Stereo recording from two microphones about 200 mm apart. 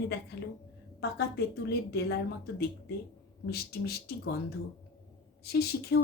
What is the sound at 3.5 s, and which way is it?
Speech, 50° left (ahead or behind).